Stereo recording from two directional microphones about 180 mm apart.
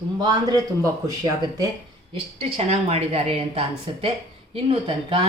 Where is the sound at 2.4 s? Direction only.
35° right (ahead or behind).